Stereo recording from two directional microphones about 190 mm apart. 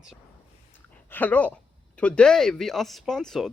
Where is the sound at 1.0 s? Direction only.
10° left (ahead or behind).